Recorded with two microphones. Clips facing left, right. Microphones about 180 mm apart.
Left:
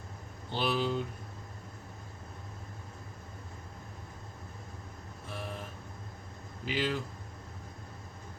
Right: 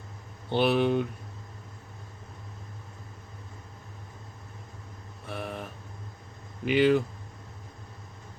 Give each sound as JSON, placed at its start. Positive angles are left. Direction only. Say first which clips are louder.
{"t": 0.5, "sound": "speech", "louder": "right 7 dB", "side_deg": -60}
{"t": 5.3, "sound": "vehicle", "louder": "right 5 dB", "side_deg": -60}
{"t": 6.7, "sound": "speech", "louder": "right 11 dB", "side_deg": -65}